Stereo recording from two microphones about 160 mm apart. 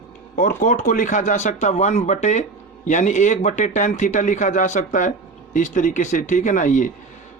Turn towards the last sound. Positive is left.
turn(degrees=50)  # may be behind; listen again after turning